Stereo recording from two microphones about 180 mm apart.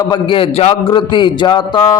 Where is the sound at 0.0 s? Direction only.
25° left (ahead or behind).